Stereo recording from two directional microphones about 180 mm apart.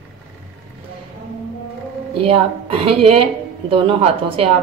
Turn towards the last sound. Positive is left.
turn(degrees=-30)  # may be behind; listen again after turning